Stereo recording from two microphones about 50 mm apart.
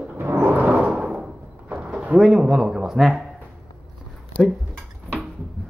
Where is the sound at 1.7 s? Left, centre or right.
Right; by 3.3 s centre.